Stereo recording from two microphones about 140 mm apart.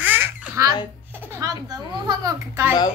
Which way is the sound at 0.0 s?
15° right (ahead or behind).